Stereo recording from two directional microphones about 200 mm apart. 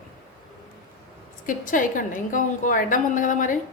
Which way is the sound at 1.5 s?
40° left (ahead or behind).